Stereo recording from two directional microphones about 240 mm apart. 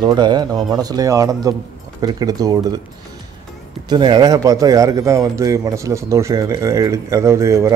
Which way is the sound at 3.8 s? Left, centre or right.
Centre.